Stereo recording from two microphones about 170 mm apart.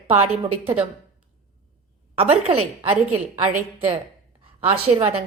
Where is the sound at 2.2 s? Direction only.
35° right (ahead or behind).